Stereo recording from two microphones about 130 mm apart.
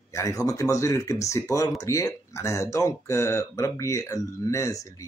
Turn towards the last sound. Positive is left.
turn(degrees=25)  # may be behind; listen again after turning